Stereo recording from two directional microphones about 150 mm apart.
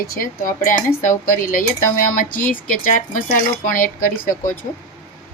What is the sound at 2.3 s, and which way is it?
Speech, 10° left (ahead or behind).